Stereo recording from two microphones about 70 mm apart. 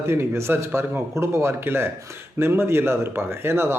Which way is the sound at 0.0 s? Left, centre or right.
Right.